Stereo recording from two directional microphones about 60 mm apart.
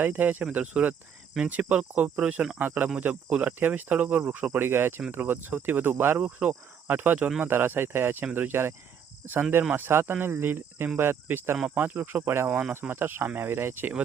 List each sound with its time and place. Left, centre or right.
0.0 s cricket: right
4.5 s speech: right
12.5 s cricket: right
12.9 s speech: right